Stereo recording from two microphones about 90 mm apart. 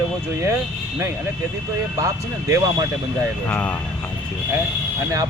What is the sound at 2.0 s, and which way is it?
Speech, 30° right (ahead or behind).